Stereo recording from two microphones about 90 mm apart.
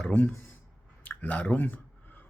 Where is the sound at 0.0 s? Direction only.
10° left (ahead or behind).